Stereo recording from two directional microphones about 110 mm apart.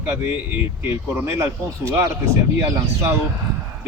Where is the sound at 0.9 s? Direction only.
25° right (ahead or behind).